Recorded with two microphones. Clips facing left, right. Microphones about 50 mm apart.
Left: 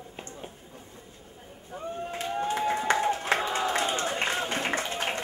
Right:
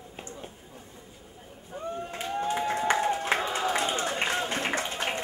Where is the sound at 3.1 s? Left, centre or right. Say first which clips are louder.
Even; centre.